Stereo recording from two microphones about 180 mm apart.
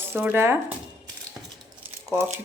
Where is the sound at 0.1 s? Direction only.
10° right (ahead or behind).